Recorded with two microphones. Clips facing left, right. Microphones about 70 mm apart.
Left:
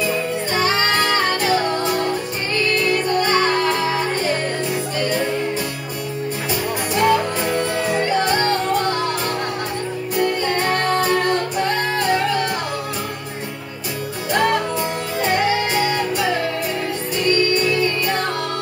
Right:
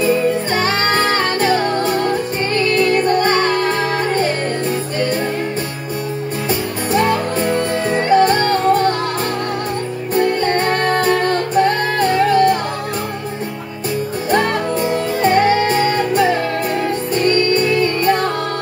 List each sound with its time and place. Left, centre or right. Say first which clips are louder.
0.6 s music: right 2 dB; right
6.9 s music: right 1 dB; right
10.1 s music: right 5 dB; right
14.3 s music: right 2 dB; right